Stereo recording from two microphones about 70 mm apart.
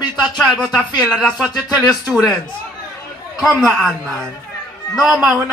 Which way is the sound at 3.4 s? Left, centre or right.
Centre.